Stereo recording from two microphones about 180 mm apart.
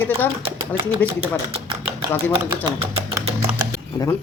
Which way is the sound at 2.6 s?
20° right (ahead or behind).